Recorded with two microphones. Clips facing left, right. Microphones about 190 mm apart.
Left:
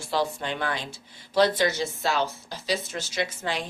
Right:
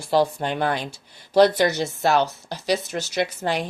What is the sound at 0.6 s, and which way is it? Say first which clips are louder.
Speech: right 6 dB; 60° right (ahead or behind).